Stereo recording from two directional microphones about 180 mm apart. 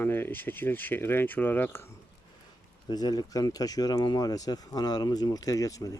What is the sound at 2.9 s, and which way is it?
Speech, 20° left (ahead or behind).